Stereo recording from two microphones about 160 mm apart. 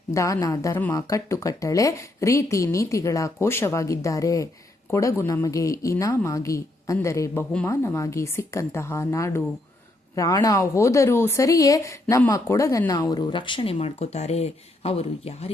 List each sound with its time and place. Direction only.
0.1 s a woman's voice: 20° left (ahead or behind); by 15.5 s 40° left (ahead or behind)